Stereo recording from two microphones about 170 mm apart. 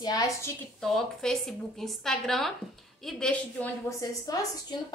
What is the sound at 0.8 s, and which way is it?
A woman's voice, 5° left (ahead or behind).